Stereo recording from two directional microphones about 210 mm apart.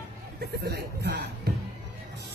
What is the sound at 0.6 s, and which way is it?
Speech, 50° right (ahead or behind).